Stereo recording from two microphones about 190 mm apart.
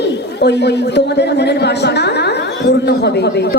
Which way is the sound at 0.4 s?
65° left (ahead or behind).